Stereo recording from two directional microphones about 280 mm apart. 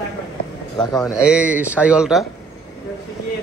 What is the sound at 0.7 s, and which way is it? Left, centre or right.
Speech, centre.